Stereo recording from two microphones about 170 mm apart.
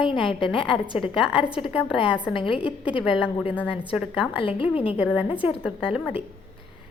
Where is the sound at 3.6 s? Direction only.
30° left (ahead or behind).